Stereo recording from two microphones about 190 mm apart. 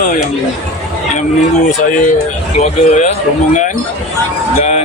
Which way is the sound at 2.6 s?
35° left (ahead or behind).